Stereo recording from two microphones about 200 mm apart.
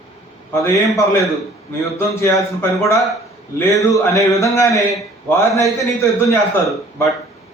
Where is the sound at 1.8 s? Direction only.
15° left (ahead or behind).